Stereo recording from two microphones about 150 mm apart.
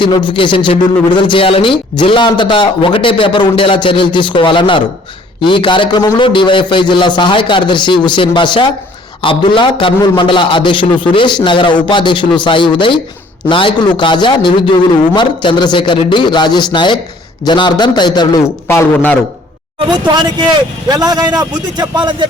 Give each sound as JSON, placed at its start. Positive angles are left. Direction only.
{"t": 0.3, "sound": "a man's voice", "side_deg": 35}
{"t": 20.2, "sound": "a man's voice", "side_deg": -30}